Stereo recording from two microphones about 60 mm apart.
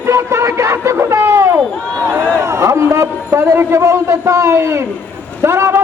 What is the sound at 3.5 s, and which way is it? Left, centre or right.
A man's voice, right.